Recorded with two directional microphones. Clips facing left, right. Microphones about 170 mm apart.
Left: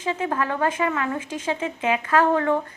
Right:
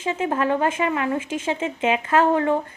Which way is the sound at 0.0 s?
20° right (ahead or behind).